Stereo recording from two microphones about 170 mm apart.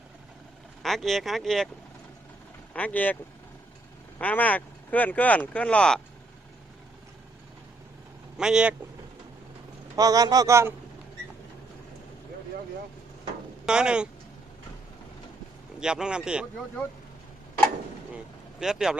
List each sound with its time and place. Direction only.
0.8 s speech: centre (ahead or behind)
2.7 s speech: 10° left (ahead or behind)
4.2 s speech: 10° left (ahead or behind)
8.4 s speech: 5° right (ahead or behind)
9.9 s a man's voice: 20° right (ahead or behind)
13.7 s speech: 5° right (ahead or behind)
15.8 s speech: 5° right (ahead or behind)
18.6 s speech: 5° right (ahead or behind)